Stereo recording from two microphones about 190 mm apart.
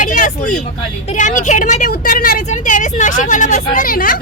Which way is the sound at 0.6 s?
40° left (ahead or behind).